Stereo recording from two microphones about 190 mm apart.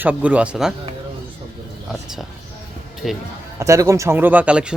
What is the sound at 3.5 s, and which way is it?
A man's voice, 15° right (ahead or behind).